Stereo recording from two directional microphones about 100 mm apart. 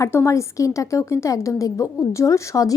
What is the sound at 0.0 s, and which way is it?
A woman's voice, 25° left (ahead or behind).